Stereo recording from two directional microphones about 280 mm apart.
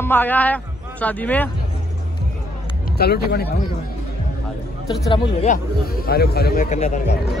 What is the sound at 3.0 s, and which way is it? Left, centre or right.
Speech, left.